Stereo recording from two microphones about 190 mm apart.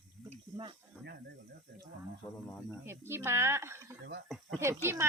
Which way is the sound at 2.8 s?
15° right (ahead or behind).